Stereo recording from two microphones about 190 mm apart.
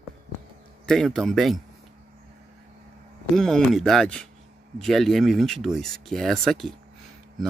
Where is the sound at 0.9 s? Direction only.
Centre (ahead or behind).